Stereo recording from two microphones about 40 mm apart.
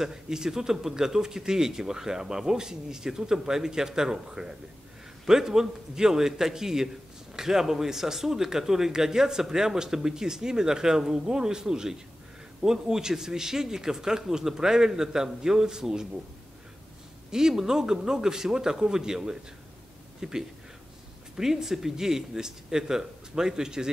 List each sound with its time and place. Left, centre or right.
0.0 s speech: centre
17.3 s speech: centre